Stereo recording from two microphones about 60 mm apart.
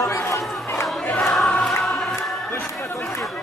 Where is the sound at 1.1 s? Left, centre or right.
Centre.